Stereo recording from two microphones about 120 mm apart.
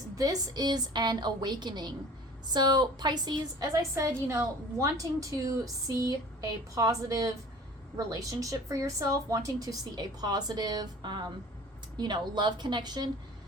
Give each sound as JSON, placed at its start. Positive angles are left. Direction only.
{"t": 0.2, "sound": "a woman's voice", "side_deg": -30}